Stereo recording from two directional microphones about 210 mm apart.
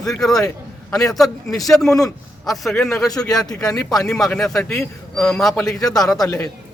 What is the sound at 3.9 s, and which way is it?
A man's voice, centre (ahead or behind).